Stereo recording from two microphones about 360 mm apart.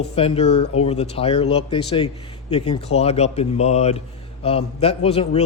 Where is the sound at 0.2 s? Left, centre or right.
Centre.